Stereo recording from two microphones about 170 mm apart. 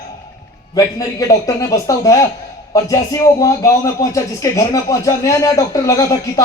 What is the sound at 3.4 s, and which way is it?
Speech, 20° left (ahead or behind).